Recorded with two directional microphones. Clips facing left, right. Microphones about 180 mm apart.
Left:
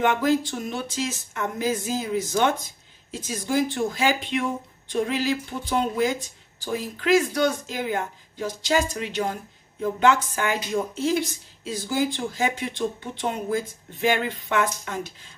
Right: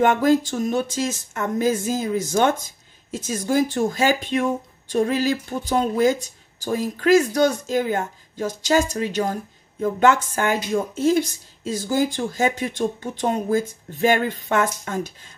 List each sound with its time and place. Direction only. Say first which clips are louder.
0.0 s speech: right 4 dB; 45° right (ahead or behind)